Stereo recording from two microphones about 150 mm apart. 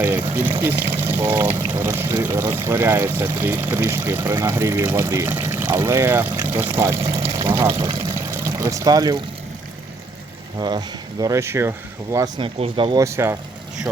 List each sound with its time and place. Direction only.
0.2 s speech: 15° right (ahead or behind)
7.9 s a sound: 25° right (ahead or behind)
10.6 s speech: 30° right (ahead or behind)
12.4 s speech: 40° right (ahead or behind)
13.0 s speech: 20° right (ahead or behind)